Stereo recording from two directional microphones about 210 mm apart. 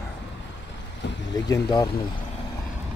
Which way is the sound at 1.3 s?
15° left (ahead or behind).